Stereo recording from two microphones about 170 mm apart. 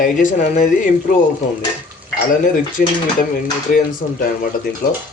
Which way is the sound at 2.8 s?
55° left (ahead or behind).